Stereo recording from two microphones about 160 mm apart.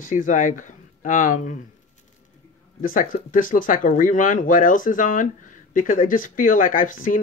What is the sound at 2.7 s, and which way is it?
Speech, 60° left (ahead or behind).